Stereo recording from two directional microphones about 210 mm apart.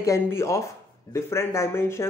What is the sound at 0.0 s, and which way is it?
Speech, 15° left (ahead or behind).